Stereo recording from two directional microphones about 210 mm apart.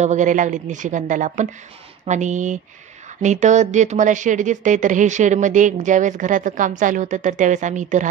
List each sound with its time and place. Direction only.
0.0 s speech: 35° right (ahead or behind)